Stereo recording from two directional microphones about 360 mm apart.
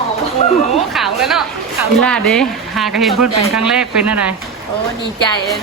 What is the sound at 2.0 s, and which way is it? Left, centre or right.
Speech, centre.